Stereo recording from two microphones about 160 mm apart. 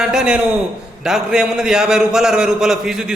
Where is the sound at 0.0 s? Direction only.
5° right (ahead or behind).